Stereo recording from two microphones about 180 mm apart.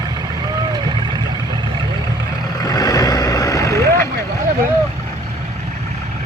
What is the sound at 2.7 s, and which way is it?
Vehicle, 20° left (ahead or behind).